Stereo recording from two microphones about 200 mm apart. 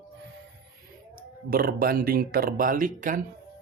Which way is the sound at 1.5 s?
45° right (ahead or behind).